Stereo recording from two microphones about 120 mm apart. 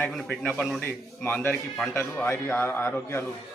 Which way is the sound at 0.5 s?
Centre (ahead or behind).